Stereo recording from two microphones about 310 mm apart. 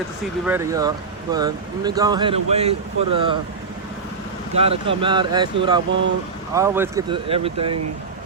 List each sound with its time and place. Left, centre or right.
0.4 s speech: centre
4.5 s speech: centre